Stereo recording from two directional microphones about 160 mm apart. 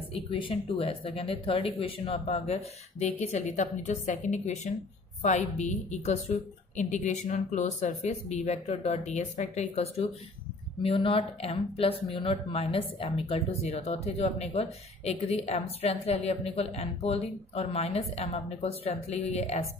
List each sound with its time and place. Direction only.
0.1 s speech: 35° left (ahead or behind)